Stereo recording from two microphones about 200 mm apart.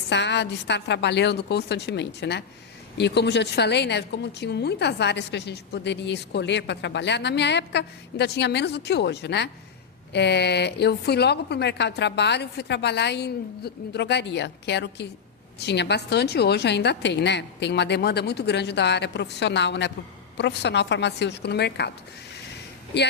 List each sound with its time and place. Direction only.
0.1 s a woman's voice: 60° left (ahead or behind)
22.9 s a woman's voice: 55° left (ahead or behind)